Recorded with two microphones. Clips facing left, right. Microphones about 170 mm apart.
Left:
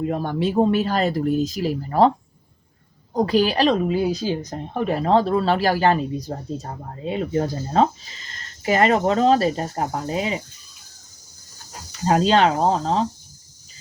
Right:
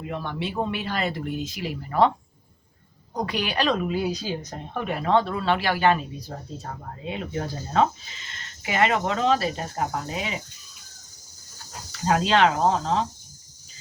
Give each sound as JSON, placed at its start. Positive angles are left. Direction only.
{"t": 0.0, "sound": "speech", "side_deg": 40}
{"t": 3.2, "sound": "speech", "side_deg": 35}
{"t": 12.0, "sound": "speech", "side_deg": 35}